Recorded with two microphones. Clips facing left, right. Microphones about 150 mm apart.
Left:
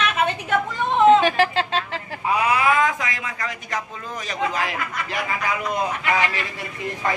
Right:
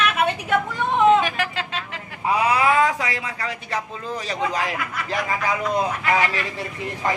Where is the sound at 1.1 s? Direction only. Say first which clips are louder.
Left 4 dB; 30° left (ahead or behind).